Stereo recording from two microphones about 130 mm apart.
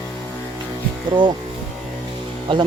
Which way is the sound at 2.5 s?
40° right (ahead or behind).